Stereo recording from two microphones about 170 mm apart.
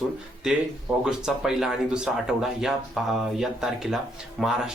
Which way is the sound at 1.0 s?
5° right (ahead or behind).